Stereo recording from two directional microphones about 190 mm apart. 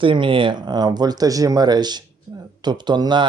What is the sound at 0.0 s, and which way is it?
Speech, 25° right (ahead or behind).